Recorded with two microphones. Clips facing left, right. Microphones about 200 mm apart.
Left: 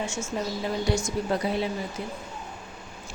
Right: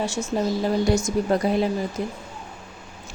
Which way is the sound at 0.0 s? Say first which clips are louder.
Right 6 dB; 35° right (ahead or behind).